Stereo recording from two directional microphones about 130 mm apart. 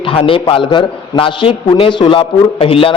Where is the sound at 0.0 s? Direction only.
45° left (ahead or behind).